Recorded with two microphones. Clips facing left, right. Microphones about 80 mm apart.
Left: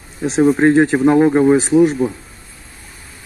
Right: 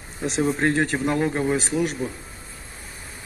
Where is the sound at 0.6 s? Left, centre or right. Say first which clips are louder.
Left 10 dB; left.